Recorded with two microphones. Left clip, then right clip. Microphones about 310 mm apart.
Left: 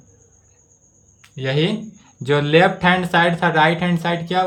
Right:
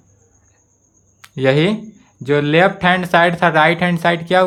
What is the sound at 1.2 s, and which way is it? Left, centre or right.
Speech, centre.